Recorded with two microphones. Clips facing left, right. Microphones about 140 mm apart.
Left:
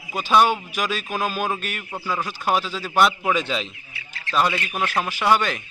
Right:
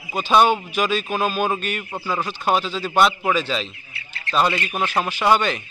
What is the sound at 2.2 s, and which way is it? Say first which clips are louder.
Speech: right 2 dB; 5° left (ahead or behind).